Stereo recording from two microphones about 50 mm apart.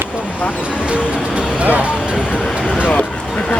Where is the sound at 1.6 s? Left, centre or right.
Right.